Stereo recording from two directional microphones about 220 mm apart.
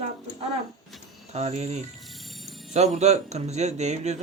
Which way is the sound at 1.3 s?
30° right (ahead or behind).